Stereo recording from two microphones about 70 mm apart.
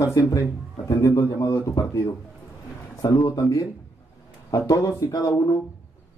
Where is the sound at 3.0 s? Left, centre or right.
Left.